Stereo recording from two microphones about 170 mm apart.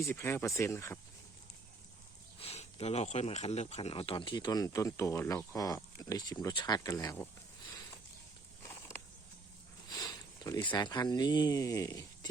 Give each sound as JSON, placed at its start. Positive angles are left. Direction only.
{"t": 0.0, "sound": "speech", "side_deg": 15}
{"t": 2.4, "sound": "speech", "side_deg": 35}
{"t": 9.9, "sound": "speech", "side_deg": 20}